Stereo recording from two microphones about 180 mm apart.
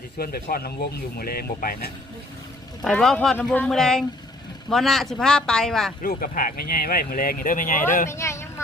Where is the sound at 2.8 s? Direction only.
Centre (ahead or behind).